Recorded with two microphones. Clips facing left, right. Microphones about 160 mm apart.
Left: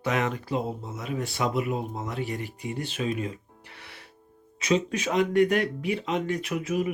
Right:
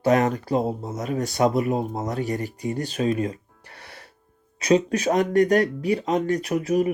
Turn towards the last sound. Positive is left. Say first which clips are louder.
# right 6 dB
turn(degrees=-40)  # may be behind; listen again after turning